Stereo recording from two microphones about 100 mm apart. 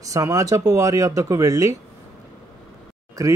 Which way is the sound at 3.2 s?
30° right (ahead or behind).